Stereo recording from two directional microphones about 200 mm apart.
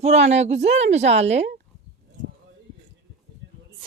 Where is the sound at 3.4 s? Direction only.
65° right (ahead or behind).